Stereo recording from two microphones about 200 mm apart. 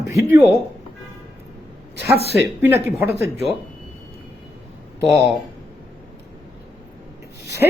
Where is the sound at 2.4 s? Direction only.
10° right (ahead or behind).